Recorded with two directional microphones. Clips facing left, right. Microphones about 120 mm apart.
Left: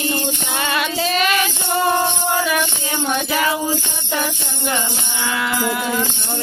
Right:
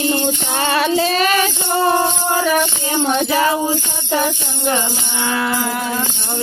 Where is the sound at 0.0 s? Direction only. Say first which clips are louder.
Right 4 dB; 30° right (ahead or behind).